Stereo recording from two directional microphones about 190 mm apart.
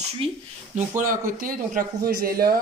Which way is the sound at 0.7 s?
45° right (ahead or behind).